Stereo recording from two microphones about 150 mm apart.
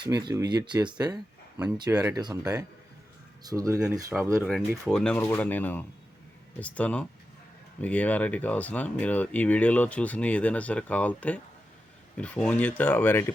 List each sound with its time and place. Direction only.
0.0 s speech: 30° right (ahead or behind)
4.1 s speech: 5° right (ahead or behind); by 13.3 s 15° left (ahead or behind)